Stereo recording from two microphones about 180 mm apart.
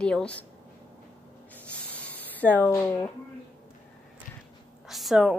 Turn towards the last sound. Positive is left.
turn(degrees=-5)  # may be behind; listen again after turning